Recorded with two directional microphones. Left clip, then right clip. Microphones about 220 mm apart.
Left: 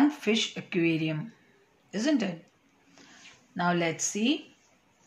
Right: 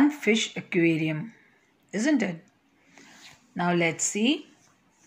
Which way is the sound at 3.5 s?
15° right (ahead or behind).